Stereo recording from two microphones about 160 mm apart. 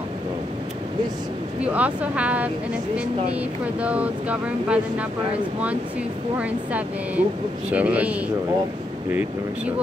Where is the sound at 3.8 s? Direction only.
10° right (ahead or behind).